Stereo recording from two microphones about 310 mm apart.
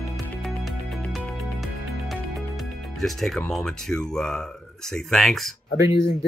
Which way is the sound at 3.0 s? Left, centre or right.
Centre.